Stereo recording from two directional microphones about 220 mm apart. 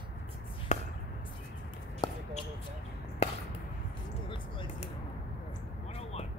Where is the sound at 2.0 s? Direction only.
20° left (ahead or behind).